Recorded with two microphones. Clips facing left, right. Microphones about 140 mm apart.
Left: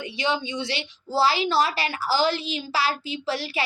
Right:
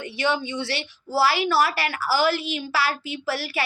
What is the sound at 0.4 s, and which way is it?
A child's voice, 15° left (ahead or behind).